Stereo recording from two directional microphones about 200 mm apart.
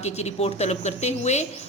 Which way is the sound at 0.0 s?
35° left (ahead or behind).